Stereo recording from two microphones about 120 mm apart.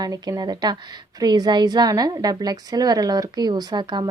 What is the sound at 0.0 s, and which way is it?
Speech, 35° right (ahead or behind).